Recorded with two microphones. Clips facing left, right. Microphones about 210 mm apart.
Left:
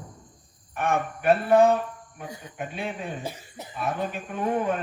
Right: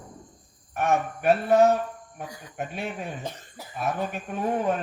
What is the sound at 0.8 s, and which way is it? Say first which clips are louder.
Speech: right 2 dB; 55° left (ahead or behind).